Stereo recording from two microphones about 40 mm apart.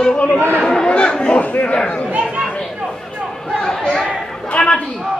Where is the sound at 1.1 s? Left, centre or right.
Left.